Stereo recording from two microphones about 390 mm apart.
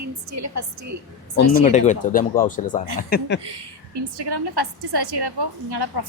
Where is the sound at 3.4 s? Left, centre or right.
Right.